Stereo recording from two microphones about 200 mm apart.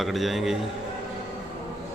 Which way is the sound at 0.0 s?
Centre (ahead or behind).